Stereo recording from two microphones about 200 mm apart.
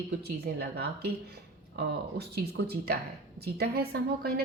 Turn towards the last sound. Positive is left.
turn(degrees=-50)  # may be behind; listen again after turning